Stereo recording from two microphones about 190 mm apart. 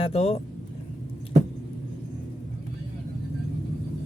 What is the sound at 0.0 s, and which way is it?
Speech, 30° left (ahead or behind).